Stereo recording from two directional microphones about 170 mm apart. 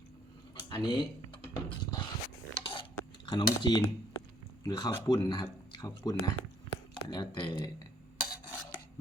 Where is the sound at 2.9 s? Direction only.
25° left (ahead or behind).